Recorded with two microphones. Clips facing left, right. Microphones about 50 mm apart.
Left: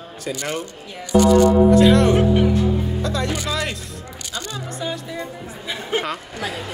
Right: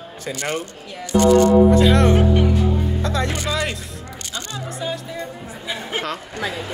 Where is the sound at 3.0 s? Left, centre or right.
Right.